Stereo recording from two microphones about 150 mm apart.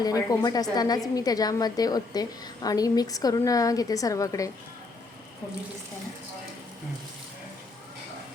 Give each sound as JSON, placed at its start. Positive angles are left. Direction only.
{"t": 0.0, "sound": "a woman's voice", "side_deg": 25}